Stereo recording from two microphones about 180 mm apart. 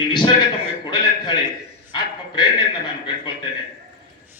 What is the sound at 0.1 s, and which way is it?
Speech, 25° left (ahead or behind).